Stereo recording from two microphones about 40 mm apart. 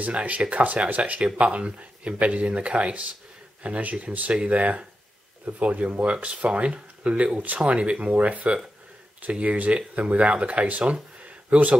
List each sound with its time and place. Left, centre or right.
0.0 s speech: right